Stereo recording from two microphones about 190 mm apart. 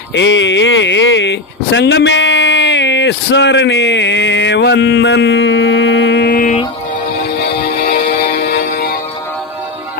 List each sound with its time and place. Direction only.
0.1 s speech: 70° left (ahead or behind); by 6.6 s 50° left (ahead or behind)
7.3 s music: 60° left (ahead or behind)